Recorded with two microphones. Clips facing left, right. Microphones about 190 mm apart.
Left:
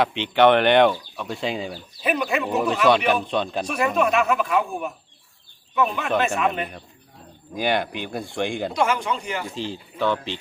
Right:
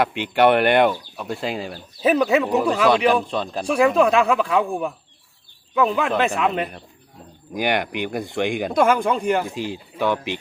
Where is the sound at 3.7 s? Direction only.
30° right (ahead or behind).